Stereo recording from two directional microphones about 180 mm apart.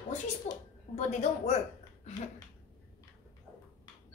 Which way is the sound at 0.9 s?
35° left (ahead or behind).